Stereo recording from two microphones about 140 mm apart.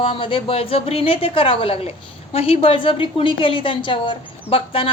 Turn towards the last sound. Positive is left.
turn(degrees=40)  # may be behind; listen again after turning